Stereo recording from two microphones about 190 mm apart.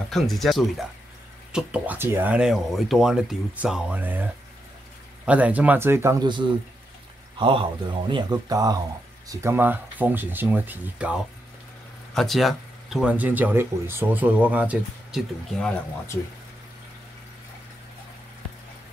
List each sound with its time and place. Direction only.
0.1 s speech: centre (ahead or behind)